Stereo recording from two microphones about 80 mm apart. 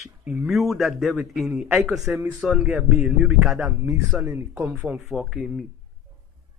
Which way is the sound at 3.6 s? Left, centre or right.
Centre.